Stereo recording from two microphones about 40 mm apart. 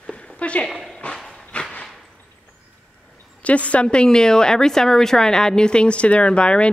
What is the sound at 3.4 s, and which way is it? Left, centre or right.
Speech, left.